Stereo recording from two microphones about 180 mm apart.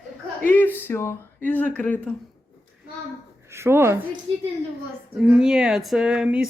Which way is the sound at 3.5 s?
15° right (ahead or behind).